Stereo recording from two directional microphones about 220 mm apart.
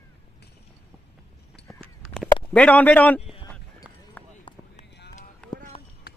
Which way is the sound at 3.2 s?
25° left (ahead or behind).